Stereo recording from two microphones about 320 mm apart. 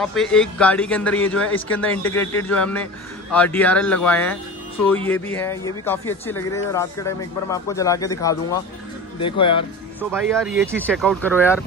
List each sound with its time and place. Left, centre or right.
0.0 s a man's voice: centre
9.9 s a man's voice: centre